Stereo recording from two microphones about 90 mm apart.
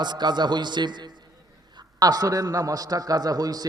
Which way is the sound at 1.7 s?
45° right (ahead or behind).